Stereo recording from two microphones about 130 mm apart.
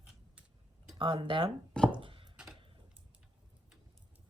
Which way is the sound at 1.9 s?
40° right (ahead or behind).